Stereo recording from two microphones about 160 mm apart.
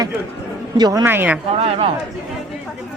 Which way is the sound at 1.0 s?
10° right (ahead or behind).